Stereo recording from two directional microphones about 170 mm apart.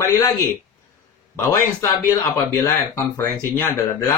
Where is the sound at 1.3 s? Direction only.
15° left (ahead or behind).